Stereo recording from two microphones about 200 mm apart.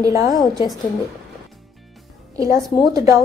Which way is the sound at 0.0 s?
15° right (ahead or behind).